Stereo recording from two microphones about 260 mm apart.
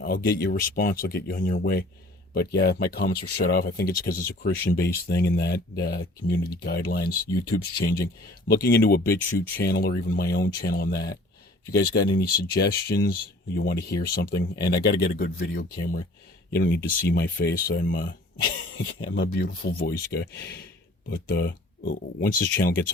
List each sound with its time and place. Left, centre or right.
0.0 s speech: left